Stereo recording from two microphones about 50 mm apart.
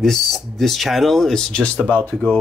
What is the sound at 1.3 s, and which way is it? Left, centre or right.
Speech, centre.